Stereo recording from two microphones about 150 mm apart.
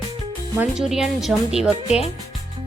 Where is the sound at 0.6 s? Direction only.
5° right (ahead or behind).